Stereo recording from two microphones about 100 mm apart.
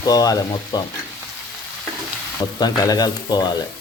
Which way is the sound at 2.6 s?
40° left (ahead or behind).